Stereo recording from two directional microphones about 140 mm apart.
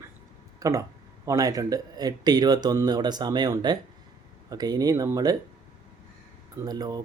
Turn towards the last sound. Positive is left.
turn(degrees=-30)  # may be behind; listen again after turning